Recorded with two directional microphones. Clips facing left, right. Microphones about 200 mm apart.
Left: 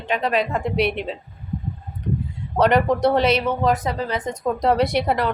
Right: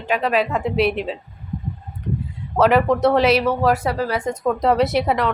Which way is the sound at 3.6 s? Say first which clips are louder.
Right 2 dB; 20° left (ahead or behind).